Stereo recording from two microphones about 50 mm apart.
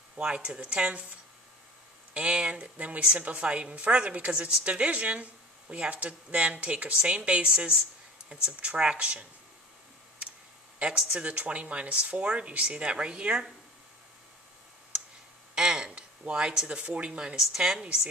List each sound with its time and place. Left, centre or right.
0.2 s a woman's voice: centre
2.1 s a woman's voice: right
10.8 s a woman's voice: right
15.5 s a sound: centre
15.9 s a sound: right
16.6 s a woman's voice: right
17.4 s speech: centre